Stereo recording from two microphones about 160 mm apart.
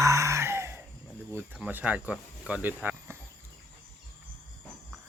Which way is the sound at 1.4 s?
10° right (ahead or behind).